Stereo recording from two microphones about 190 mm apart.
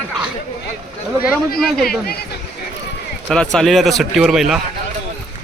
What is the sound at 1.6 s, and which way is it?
Speech, centre (ahead or behind).